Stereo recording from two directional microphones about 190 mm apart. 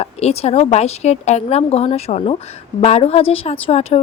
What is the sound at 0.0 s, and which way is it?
Speech, 35° left (ahead or behind).